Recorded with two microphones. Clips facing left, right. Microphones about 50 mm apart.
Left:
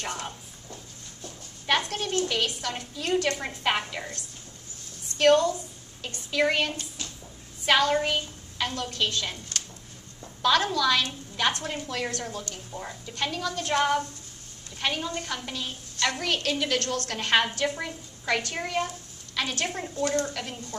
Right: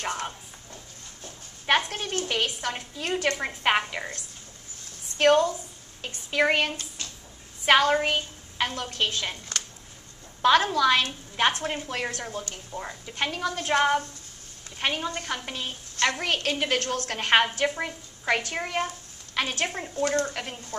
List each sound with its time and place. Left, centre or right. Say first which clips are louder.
1.8 s a woman's voice: left 2 dB; right
10.4 s a woman's voice: right 3 dB; right
20.1 s a woman's voice: right 1 dB; right